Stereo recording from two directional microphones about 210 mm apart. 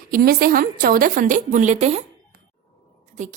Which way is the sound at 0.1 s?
45° right (ahead or behind).